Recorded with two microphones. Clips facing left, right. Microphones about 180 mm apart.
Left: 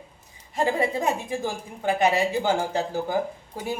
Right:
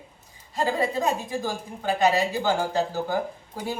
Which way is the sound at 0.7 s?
20° left (ahead or behind).